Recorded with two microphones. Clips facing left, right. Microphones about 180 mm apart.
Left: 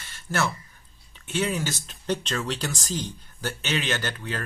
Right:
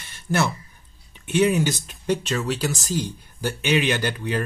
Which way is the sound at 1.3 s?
15° right (ahead or behind).